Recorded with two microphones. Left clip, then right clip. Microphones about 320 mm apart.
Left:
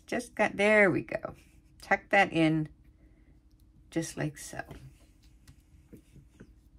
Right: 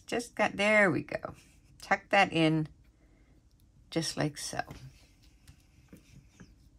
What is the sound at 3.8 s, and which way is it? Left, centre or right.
Speech, centre.